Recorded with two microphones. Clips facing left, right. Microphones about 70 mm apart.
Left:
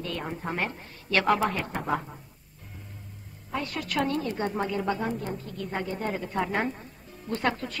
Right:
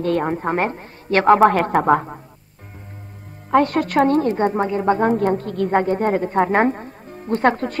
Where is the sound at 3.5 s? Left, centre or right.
Right.